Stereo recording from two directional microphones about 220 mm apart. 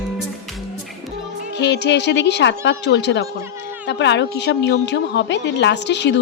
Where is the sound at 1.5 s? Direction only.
50° left (ahead or behind).